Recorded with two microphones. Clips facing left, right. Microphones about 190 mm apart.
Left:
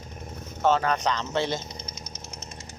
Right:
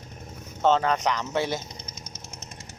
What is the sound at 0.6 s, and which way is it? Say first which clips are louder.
Speech: right 1 dB; 20° right (ahead or behind).